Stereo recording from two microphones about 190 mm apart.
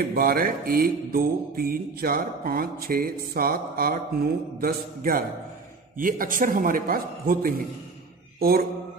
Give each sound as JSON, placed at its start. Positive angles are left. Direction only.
{"t": 0.1, "sound": "mantra", "side_deg": -50}
{"t": 8.4, "sound": "speech", "side_deg": -55}